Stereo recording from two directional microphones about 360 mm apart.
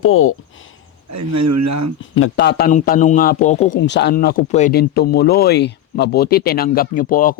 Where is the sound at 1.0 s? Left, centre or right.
Right.